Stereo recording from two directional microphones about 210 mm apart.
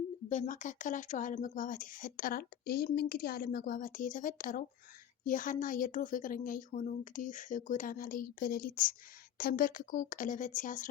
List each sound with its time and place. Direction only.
0.3 s speech: 35° left (ahead or behind)